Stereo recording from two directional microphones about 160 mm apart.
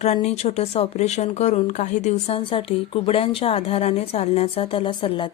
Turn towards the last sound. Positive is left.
turn(degrees=30)  # may be behind; listen again after turning